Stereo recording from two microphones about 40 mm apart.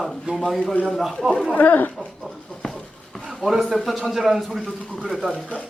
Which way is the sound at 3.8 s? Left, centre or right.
Centre.